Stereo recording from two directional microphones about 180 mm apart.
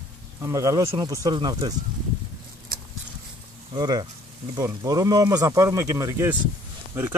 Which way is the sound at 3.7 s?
25° right (ahead or behind).